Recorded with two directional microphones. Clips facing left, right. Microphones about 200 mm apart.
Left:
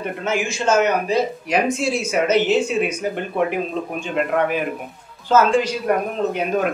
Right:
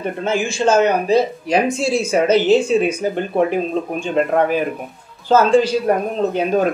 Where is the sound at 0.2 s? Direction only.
30° right (ahead or behind).